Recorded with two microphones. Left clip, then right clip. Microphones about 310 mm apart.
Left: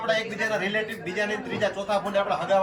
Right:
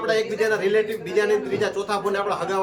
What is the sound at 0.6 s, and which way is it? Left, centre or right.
A man's voice, centre.